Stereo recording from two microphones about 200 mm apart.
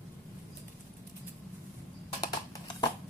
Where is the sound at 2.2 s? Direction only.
20° left (ahead or behind).